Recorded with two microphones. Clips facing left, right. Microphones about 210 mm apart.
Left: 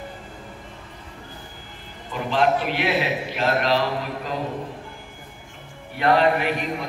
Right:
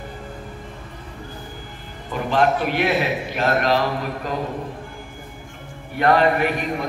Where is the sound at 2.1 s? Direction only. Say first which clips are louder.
Right 2 dB; 50° right (ahead or behind).